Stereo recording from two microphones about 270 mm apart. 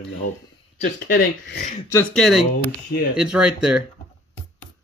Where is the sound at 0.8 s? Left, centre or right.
Left.